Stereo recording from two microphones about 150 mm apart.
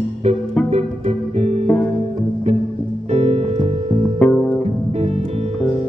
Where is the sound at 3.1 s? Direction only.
45° right (ahead or behind).